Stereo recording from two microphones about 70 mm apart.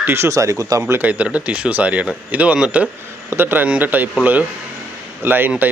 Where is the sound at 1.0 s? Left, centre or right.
Right.